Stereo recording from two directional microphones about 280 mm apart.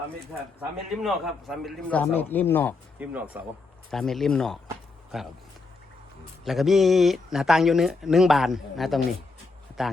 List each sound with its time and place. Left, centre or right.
0.9 s speech: centre
3.0 s speech: centre
6.4 s speech: centre